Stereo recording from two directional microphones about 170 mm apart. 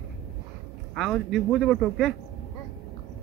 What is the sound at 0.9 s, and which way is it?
Speech, centre (ahead or behind).